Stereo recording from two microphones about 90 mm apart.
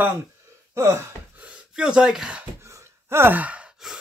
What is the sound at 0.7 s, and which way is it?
Gasp, 30° right (ahead or behind).